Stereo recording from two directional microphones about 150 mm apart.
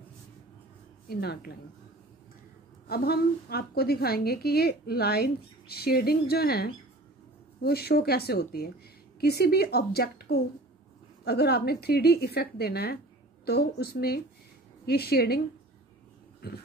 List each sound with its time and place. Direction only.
1.0 s a woman's voice: 90° left
2.9 s a woman's voice: 90° left
16.4 s a woman's voice: 90° left